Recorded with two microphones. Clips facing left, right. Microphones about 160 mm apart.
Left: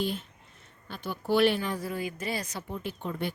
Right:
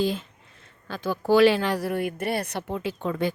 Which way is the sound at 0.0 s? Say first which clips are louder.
Right 6 dB; 90° right.